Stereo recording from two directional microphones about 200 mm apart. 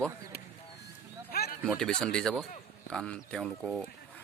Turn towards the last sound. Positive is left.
turn(degrees=0)  # may be behind; listen again after turning